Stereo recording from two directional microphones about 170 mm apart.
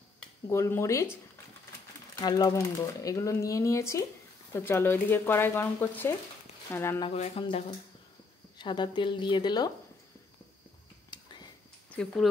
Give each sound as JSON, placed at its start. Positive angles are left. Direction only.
{"t": 0.5, "sound": "speech", "side_deg": 15}
{"t": 2.1, "sound": "speech", "side_deg": 20}
{"t": 7.2, "sound": "speech", "side_deg": 35}
{"t": 11.1, "sound": "a sound", "side_deg": 25}
{"t": 11.9, "sound": "speech", "side_deg": 5}